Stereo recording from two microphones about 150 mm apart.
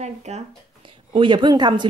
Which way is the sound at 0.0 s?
50° right (ahead or behind).